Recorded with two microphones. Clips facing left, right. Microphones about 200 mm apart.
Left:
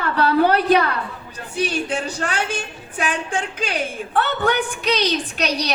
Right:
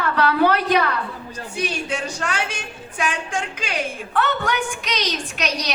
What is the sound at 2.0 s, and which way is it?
Speech, 35° left (ahead or behind).